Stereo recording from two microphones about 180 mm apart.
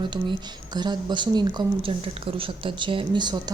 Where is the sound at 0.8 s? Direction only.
25° right (ahead or behind).